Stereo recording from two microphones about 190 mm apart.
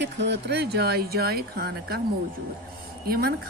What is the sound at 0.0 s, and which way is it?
Speech, 65° right (ahead or behind).